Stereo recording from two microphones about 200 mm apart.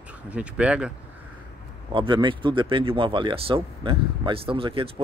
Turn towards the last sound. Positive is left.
turn(degrees=-25)  # may be behind; listen again after turning